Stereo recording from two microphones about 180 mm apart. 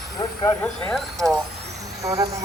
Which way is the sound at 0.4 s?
5° left (ahead or behind).